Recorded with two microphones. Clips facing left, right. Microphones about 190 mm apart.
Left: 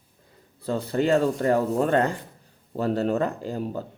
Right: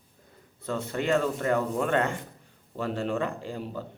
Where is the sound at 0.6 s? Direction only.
35° left (ahead or behind).